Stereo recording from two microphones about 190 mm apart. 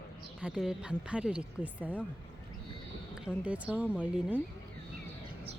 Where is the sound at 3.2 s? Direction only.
5° right (ahead or behind).